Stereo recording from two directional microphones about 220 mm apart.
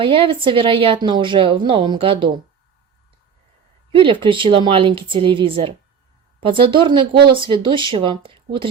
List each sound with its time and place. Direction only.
0.0 s a woman's voice: 25° right (ahead or behind)
3.9 s a woman's voice: 25° right (ahead or behind)